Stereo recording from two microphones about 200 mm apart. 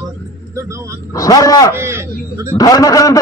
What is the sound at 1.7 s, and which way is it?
Speech, 10° right (ahead or behind).